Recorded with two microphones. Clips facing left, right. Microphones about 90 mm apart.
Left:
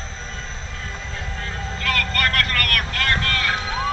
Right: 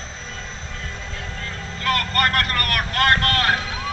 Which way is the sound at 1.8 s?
35° right (ahead or behind).